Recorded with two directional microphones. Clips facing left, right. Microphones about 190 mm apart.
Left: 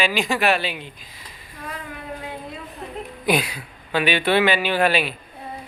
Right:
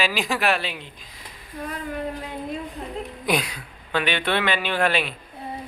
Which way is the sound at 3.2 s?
5° left (ahead or behind).